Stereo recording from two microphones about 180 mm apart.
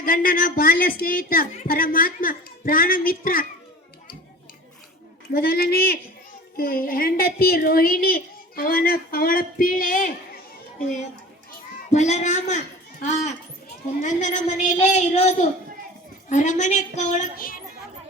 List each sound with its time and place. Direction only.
0.0 s a woman's voice: 50° left (ahead or behind)
5.3 s a woman's voice: 55° left (ahead or behind)
11.9 s a woman's voice: 40° left (ahead or behind)